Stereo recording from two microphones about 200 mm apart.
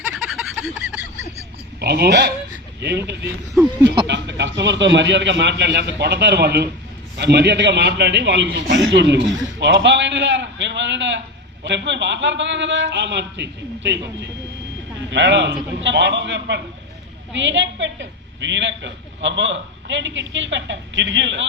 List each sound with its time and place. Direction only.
0.0 s fowl: centre (ahead or behind)
1.8 s a woman's voice: 55° right (ahead or behind)
4.0 s a woman's voice: 60° right (ahead or behind)